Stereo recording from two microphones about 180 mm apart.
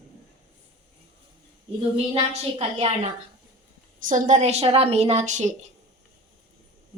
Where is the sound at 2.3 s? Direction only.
35° right (ahead or behind).